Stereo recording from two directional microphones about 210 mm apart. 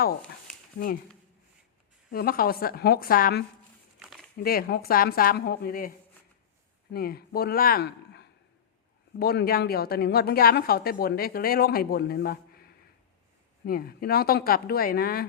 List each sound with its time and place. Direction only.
2.1 s a woman's voice: 45° left (ahead or behind)
4.0 s a sound: centre (ahead or behind)
4.4 s a woman's voice: 45° left (ahead or behind)
6.9 s a woman's voice: 45° left (ahead or behind)